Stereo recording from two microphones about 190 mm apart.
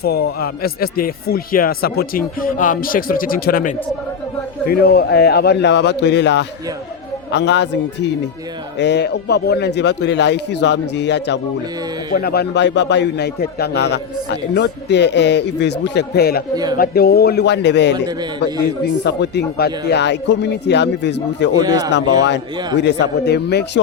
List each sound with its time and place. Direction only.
0.0 s a man's voice: 55° left (ahead or behind)
19.0 s a man's voice: 65° left (ahead or behind)
21.6 s speech: 20° right (ahead or behind)
22.8 s a man's voice: 65° left (ahead or behind)